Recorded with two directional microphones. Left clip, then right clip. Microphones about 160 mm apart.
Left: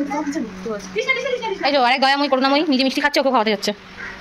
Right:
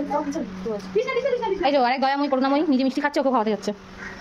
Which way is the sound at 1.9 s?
5° right (ahead or behind).